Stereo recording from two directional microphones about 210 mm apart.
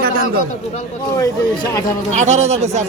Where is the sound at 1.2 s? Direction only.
15° left (ahead or behind).